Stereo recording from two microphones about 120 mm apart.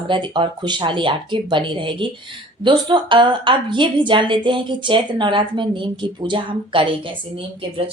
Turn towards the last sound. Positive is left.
turn(degrees=-50)  # may be behind; listen again after turning